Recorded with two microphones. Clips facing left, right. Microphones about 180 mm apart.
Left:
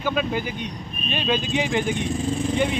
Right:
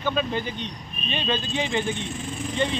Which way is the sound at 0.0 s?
10° left (ahead or behind).